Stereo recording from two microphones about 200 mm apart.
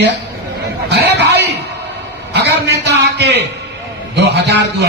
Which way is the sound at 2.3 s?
60° right (ahead or behind).